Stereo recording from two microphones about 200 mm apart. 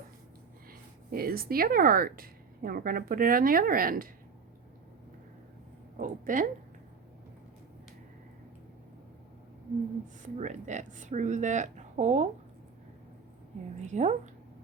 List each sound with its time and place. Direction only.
0.7 s speech: 50° right (ahead or behind)
6.0 s speech: 40° right (ahead or behind)
10.2 s speech: 35° right (ahead or behind)
13.8 s speech: 35° right (ahead or behind)